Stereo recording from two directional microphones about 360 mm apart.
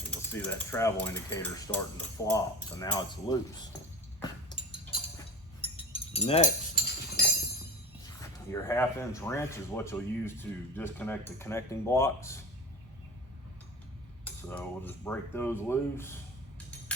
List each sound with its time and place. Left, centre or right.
0.1 s speech: centre
4.2 s a sound: centre
5.6 s chink: centre
8.0 s speech: centre
14.3 s speech: centre